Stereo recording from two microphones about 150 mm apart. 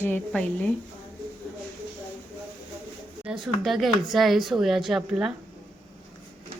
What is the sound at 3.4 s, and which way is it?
Speech, centre (ahead or behind).